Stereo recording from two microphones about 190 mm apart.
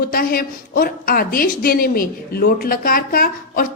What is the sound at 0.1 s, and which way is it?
A woman's voice, 50° left (ahead or behind).